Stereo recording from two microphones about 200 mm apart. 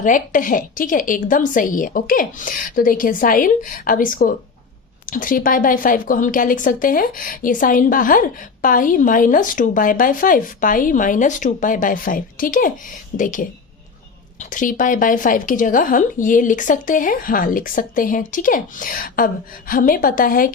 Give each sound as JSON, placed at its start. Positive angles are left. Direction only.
{"t": 0.0, "sound": "a woman's voice", "side_deg": 40}